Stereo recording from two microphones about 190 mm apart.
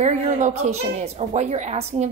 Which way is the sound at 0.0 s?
35° right (ahead or behind).